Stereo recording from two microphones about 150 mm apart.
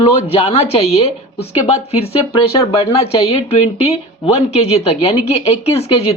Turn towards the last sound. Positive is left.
turn(degrees=45)  # may be behind; listen again after turning